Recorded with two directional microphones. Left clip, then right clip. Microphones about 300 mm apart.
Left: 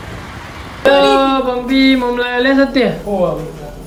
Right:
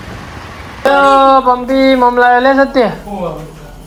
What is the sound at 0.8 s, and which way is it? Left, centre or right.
Speech, centre.